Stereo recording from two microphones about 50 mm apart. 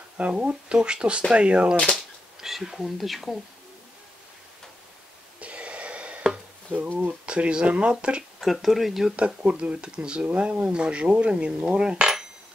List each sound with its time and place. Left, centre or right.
0.2 s speech: right
2.4 s speech: centre
5.4 s a sound: right
6.7 s speech: right
7.2 s speech: right
8.4 s speech: centre
9.1 s speech: right